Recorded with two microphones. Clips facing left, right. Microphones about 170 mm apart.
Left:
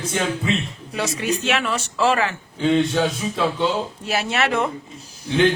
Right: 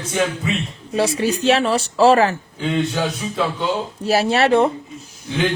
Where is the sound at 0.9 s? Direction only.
30° right (ahead or behind).